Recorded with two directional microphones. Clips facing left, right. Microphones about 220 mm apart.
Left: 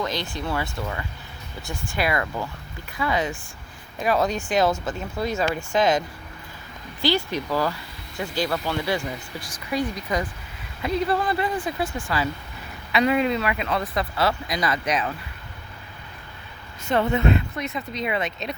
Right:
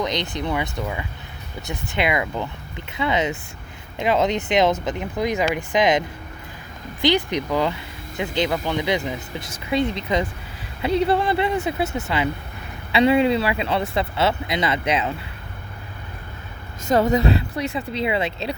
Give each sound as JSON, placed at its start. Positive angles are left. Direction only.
{"t": 0.0, "sound": "speech", "side_deg": -20}
{"t": 16.8, "sound": "speech", "side_deg": -40}